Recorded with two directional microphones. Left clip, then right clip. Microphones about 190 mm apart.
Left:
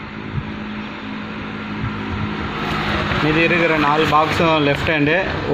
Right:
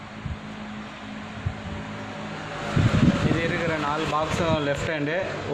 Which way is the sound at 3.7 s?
10° left (ahead or behind).